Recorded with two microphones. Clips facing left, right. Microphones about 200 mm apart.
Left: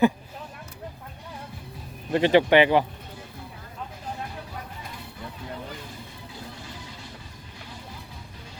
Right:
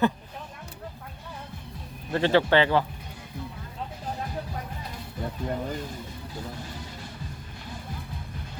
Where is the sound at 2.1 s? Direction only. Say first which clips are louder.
Left 3 dB; 15° left (ahead or behind).